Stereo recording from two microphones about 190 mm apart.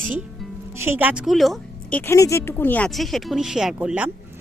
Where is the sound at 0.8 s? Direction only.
10° right (ahead or behind).